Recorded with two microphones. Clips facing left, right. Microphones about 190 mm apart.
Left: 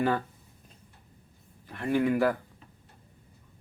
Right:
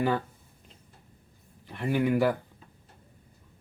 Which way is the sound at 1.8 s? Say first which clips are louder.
Even; 5° right (ahead or behind).